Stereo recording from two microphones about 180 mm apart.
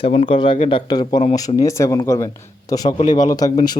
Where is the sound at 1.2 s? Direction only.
40° left (ahead or behind).